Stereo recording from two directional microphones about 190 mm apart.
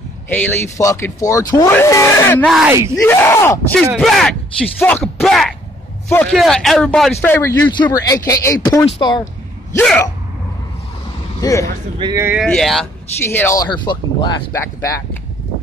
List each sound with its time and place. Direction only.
0.3 s speech: 10° left (ahead or behind)
2.4 s speech: centre (ahead or behind)
3.0 s speech: 10° left (ahead or behind)
7.7 s speech: 20° left (ahead or behind)
11.4 s speech: 15° left (ahead or behind)
12.0 s speech: 20° right (ahead or behind)
12.4 s speech: centre (ahead or behind); by 15.0 s 15° left (ahead or behind)